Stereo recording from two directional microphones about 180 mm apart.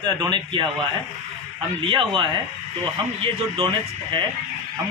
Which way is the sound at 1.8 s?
30° right (ahead or behind).